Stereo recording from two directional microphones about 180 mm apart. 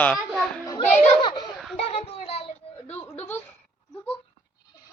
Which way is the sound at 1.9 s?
30° left (ahead or behind).